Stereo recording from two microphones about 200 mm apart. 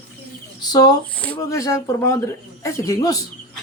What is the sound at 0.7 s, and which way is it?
Speech, 20° left (ahead or behind).